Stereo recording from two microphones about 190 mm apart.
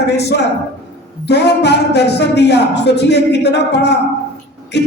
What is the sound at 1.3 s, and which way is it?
Speech, 60° left (ahead or behind).